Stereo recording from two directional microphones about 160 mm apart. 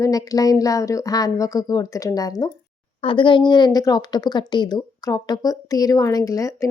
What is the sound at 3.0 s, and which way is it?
A woman's voice, 35° left (ahead or behind).